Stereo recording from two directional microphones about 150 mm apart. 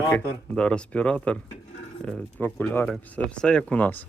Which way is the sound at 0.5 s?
5° left (ahead or behind).